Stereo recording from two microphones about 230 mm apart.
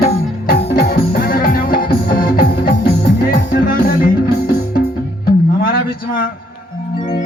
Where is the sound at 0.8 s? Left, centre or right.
Left.